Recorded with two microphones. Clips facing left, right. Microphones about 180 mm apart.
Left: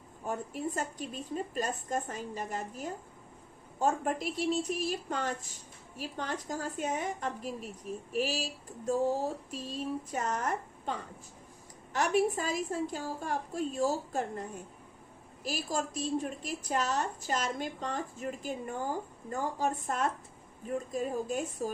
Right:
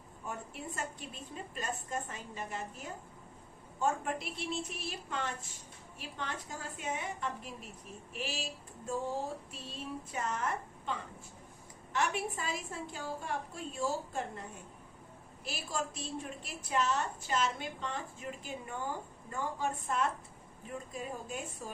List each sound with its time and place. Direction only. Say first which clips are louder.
0.3 s a woman's voice: left 8 dB; 40° left (ahead or behind)
11.9 s a woman's voice: left 6 dB; 40° left (ahead or behind)
15.4 s a woman's voice: left 5 dB; 40° left (ahead or behind)